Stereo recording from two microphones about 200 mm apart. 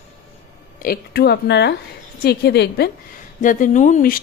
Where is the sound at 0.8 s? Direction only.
50° left (ahead or behind).